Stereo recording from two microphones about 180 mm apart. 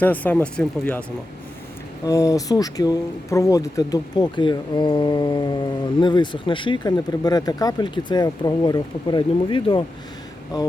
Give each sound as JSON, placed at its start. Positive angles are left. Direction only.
{"t": 0.0, "sound": "speech", "side_deg": 10}
{"t": 2.0, "sound": "speech", "side_deg": 20}